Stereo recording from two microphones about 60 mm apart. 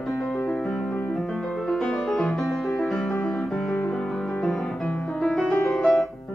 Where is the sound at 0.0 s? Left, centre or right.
Centre.